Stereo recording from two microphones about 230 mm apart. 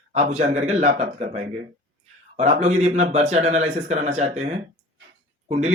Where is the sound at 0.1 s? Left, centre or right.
Right.